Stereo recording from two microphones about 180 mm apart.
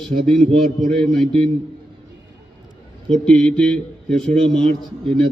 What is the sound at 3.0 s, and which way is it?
A man's voice, 5° left (ahead or behind).